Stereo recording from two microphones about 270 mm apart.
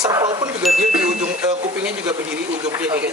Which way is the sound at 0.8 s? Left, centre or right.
Centre.